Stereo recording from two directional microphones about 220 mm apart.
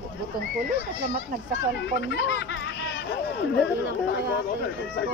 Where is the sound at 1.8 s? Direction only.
55° left (ahead or behind).